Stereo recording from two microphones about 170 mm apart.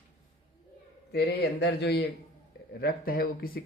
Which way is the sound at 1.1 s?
75° left (ahead or behind).